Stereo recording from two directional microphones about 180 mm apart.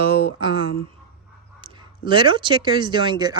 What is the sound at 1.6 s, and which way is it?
Speech, 25° right (ahead or behind).